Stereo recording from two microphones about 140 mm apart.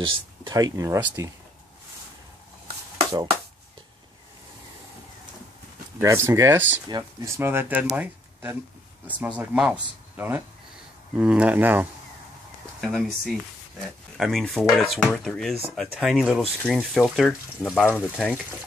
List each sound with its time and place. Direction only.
0.0 s speech: 35° right (ahead or behind); by 1.3 s 20° right (ahead or behind)
5.9 s speech: 20° right (ahead or behind)
6.9 s speech: 25° right (ahead or behind)
12.8 s speech: centre (ahead or behind)